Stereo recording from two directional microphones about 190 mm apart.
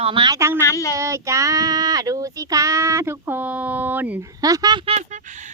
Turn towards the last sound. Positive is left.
turn(degrees=-40)  # may be behind; listen again after turning